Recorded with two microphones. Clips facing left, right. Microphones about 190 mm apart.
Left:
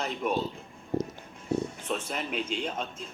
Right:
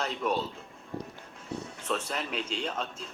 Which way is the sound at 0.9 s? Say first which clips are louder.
Left 8 dB; 45° left (ahead or behind).